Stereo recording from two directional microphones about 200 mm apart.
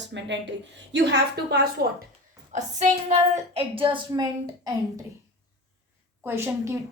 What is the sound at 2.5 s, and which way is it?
A woman's voice, 35° right (ahead or behind).